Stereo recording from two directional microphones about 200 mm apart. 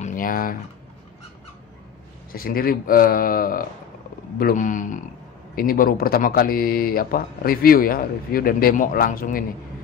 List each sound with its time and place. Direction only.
0.0 s typing: 40° left (ahead or behind)
2.3 s speech: 45° left (ahead or behind)